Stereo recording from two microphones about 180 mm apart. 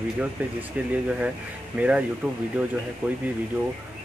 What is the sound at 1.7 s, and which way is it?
Speech, 10° right (ahead or behind).